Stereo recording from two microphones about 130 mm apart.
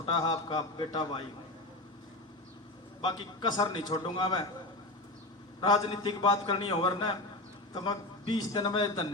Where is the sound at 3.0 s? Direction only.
35° left (ahead or behind).